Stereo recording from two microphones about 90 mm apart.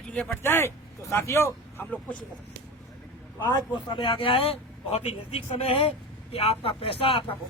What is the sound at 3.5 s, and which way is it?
Speech, 55° left (ahead or behind).